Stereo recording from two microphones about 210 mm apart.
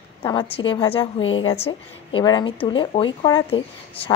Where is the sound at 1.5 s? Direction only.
25° left (ahead or behind).